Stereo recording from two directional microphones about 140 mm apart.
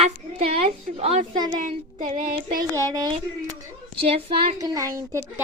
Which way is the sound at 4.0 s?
45° right (ahead or behind).